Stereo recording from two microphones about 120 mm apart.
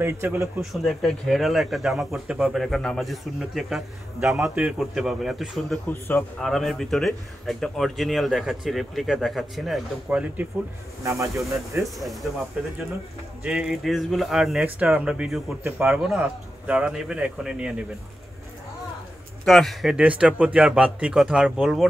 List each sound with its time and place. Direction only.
0.0 s speech: 20° right (ahead or behind)
0.6 s speech: centre (ahead or behind)
5.9 s a man's voice: 15° left (ahead or behind)
6.4 s speech: centre (ahead or behind)
11.1 s speech: 25° right (ahead or behind)
12.0 s speech: centre (ahead or behind)
13.4 s speech: 5° right (ahead or behind)
15.6 s a man's voice: 20° right (ahead or behind)
19.4 s a man's voice: centre (ahead or behind)